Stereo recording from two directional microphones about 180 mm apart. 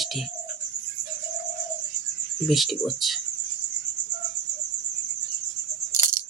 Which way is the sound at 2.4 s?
Centre (ahead or behind).